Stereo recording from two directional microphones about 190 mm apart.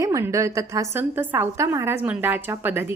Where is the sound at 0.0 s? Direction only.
15° right (ahead or behind).